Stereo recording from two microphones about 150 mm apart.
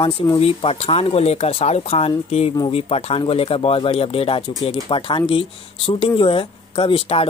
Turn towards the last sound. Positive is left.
turn(degrees=40)  # may be behind; listen again after turning